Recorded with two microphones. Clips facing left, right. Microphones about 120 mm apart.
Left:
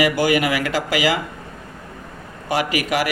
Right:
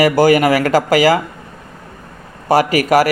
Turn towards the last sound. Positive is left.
turn(degrees=-40)  # may be behind; listen again after turning